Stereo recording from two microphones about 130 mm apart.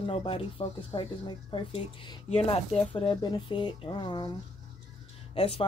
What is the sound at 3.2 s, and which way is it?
Speech, 35° left (ahead or behind).